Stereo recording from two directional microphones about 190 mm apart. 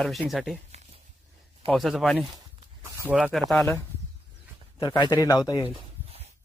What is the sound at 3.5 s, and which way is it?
Speech, centre (ahead or behind).